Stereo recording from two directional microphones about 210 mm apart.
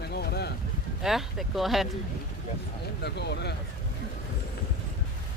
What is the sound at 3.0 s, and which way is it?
Speech, 55° left (ahead or behind).